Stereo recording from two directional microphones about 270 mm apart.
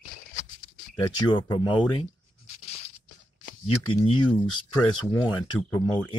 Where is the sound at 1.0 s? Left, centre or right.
Centre.